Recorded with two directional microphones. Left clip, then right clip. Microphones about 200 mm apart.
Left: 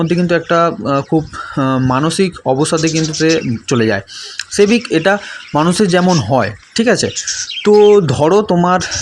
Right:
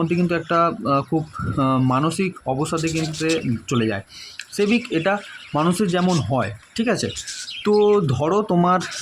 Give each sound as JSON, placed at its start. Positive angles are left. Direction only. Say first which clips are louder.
{"t": 0.0, "sound": "speech", "louder": "left 8 dB", "side_deg": 15}